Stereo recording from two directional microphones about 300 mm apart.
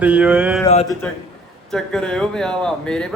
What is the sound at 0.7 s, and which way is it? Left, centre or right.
Speech, left.